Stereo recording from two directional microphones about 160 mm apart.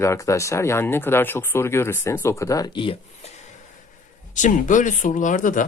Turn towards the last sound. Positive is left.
turn(degrees=55)  # may be behind; listen again after turning